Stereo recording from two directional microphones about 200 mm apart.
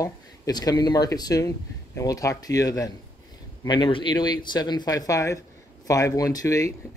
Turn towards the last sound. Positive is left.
turn(degrees=15)  # may be behind; listen again after turning